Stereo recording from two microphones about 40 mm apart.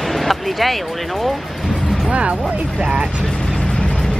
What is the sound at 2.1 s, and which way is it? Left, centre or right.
Music, right.